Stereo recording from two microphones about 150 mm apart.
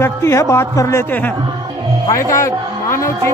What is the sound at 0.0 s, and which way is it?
A man's voice, 20° left (ahead or behind).